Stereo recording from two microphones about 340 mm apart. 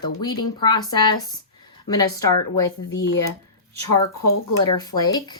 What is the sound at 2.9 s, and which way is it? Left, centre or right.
Speech, left.